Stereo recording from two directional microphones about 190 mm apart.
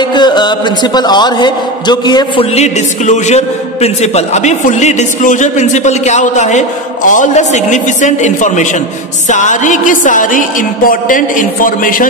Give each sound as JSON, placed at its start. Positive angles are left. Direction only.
{"t": 0.0, "sound": "a man's voice", "side_deg": 25}
{"t": 2.5, "sound": "a man's voice", "side_deg": 35}